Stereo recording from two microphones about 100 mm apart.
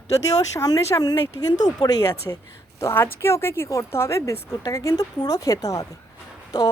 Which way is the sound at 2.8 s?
25° left (ahead or behind).